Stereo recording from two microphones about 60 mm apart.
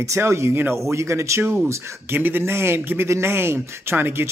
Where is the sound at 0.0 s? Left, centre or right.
Right.